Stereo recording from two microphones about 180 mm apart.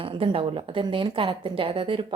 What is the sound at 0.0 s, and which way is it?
A woman's voice, 30° right (ahead or behind).